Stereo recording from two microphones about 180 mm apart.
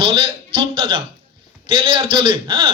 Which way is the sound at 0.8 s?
30° right (ahead or behind).